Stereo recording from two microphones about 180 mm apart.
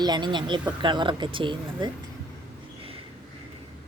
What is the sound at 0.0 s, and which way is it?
Speech, 25° right (ahead or behind).